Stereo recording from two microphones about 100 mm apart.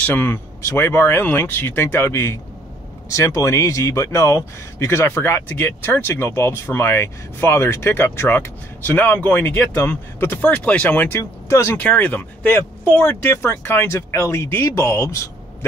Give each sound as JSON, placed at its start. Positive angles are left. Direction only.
{"t": 0.0, "sound": "speech", "side_deg": 15}
{"t": 0.6, "sound": "speech", "side_deg": 30}
{"t": 11.1, "sound": "speech", "side_deg": 30}
{"t": 11.8, "sound": "speech", "side_deg": 15}